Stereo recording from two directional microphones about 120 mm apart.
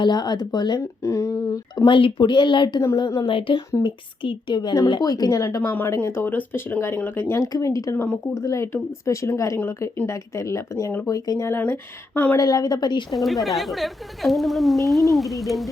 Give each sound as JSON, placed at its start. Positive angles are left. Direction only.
{"t": 0.0, "sound": "speech", "side_deg": 35}
{"t": 1.0, "sound": "speech", "side_deg": 25}
{"t": 7.4, "sound": "speech", "side_deg": 30}
{"t": 7.9, "sound": "speech", "side_deg": 10}
{"t": 8.4, "sound": "speech", "side_deg": 25}
{"t": 12.4, "sound": "speech", "side_deg": 30}
{"t": 13.1, "sound": "a woman's voice", "side_deg": 0}